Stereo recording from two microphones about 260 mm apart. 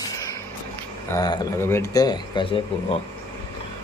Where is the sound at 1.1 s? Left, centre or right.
Centre.